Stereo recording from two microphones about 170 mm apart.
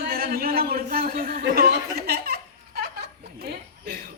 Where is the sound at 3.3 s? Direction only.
65° right (ahead or behind).